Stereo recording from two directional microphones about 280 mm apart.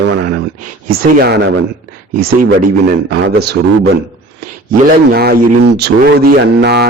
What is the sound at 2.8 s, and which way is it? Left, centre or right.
Speech, right.